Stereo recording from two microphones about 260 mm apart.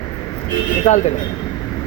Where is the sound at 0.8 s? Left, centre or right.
Left.